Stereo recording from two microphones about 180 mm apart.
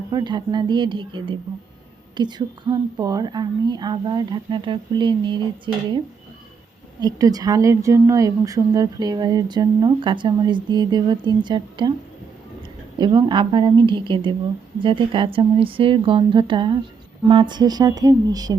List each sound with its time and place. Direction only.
0.1 s speech: 25° right (ahead or behind)
7.0 s speech: 20° right (ahead or behind)
13.0 s speech: 25° right (ahead or behind)